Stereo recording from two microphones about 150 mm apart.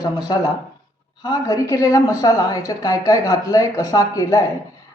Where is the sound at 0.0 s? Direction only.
25° left (ahead or behind).